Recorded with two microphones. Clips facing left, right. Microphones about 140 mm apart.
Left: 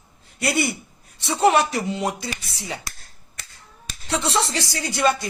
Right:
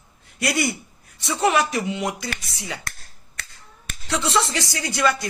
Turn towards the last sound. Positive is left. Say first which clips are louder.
# left 1 dB
turn(degrees=25)  # may be behind; listen again after turning